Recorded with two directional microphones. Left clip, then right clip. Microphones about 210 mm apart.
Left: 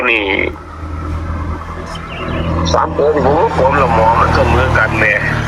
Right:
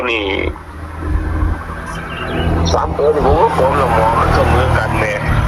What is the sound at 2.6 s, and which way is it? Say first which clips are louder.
Speech: left 3 dB; 5° left (ahead or behind).